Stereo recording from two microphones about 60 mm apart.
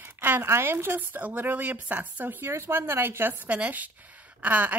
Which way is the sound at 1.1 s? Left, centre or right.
Right.